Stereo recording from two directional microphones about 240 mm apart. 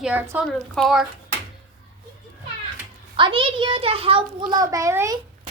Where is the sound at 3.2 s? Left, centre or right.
Right.